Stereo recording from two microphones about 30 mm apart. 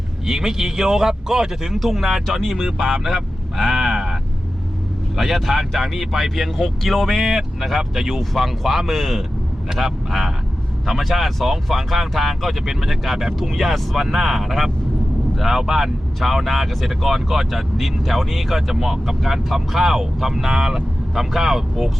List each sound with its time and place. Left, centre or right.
0.3 s speech: centre
1.8 s speech: centre
7.2 s speech: centre
8.2 s speech: centre